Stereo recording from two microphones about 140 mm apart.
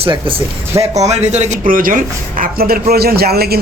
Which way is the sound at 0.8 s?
50° right (ahead or behind).